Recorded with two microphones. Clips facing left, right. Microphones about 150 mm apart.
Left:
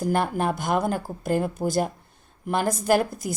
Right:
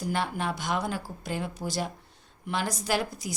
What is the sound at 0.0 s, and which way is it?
A woman's voice, 50° left (ahead or behind).